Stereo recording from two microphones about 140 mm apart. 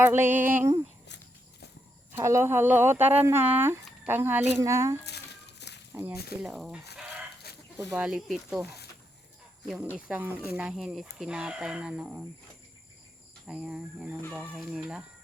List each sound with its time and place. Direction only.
0.0 s speech: 15° right (ahead or behind)
2.1 s speech: 20° right (ahead or behind)
6.4 s speech: 5° right (ahead or behind)
7.9 s speech: 5° right (ahead or behind)
9.6 s speech: 5° right (ahead or behind)
13.5 s speech: 5° right (ahead or behind)
14.2 s speech: 10° left (ahead or behind)